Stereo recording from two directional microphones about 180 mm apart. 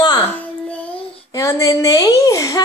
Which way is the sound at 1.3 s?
20° left (ahead or behind).